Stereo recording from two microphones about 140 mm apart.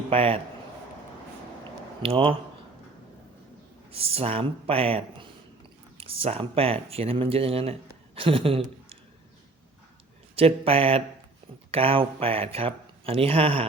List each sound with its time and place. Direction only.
0.1 s speech: 40° right (ahead or behind)
2.0 s speech: 40° right (ahead or behind)
3.9 s speech: 45° right (ahead or behind)
10.3 s speech: 45° right (ahead or behind)